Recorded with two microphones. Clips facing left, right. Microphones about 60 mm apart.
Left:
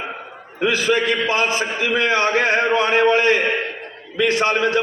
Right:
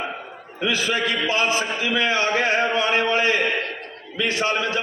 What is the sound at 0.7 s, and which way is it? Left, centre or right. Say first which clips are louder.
A man's voice: left 4 dB; left.